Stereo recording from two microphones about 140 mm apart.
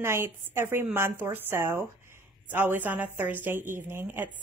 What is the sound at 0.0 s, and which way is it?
A woman's voice, 20° right (ahead or behind).